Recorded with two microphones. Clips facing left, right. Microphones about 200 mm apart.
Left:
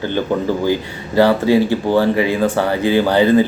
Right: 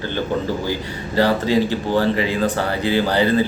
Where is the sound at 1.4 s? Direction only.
15° left (ahead or behind).